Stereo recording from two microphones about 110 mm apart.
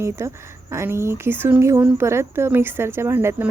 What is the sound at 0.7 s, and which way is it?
Speech, 25° right (ahead or behind).